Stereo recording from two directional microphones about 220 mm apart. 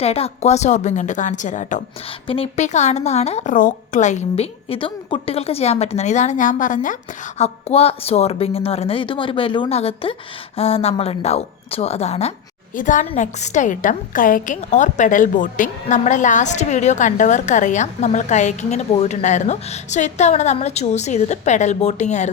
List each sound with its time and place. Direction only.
0.0 s a woman's voice: 25° left (ahead or behind)
2.2 s a woman's voice: 25° left (ahead or behind)